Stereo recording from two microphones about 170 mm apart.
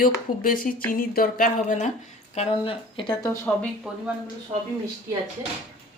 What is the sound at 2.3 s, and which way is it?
Speech, 35° left (ahead or behind).